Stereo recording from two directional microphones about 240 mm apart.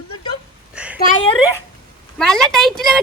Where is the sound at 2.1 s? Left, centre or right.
Centre.